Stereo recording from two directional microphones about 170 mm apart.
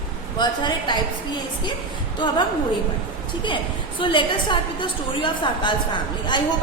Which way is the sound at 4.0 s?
30° left (ahead or behind).